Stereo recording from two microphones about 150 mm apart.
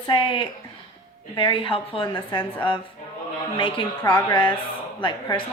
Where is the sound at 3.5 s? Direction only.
35° left (ahead or behind).